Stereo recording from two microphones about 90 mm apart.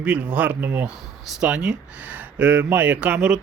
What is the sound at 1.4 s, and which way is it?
Speech, 10° right (ahead or behind).